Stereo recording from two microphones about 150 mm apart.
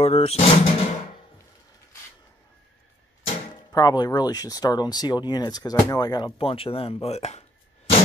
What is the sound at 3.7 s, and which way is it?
Speech, 25° left (ahead or behind).